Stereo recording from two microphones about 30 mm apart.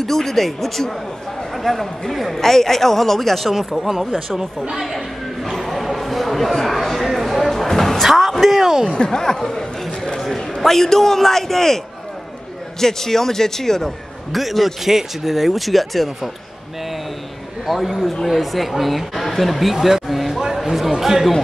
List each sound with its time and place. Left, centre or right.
0.0 s a man's voice: centre
4.6 s speech: centre
5.4 s a sound: centre
7.6 s music: centre
8.0 s a sound: centre
8.9 s speech: left
10.6 s a man's voice: centre
12.8 s a man's voice: centre
14.3 s speech: centre
17.6 s speech: centre
20.6 s a sound: centre
21.0 s speech: centre